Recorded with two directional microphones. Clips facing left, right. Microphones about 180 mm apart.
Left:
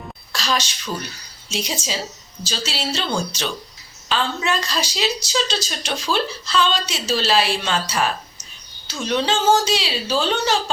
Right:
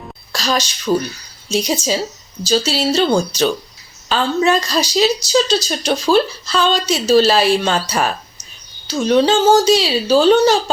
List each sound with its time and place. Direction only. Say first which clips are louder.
0.3 s a woman's voice: right 4 dB; 40° right (ahead or behind)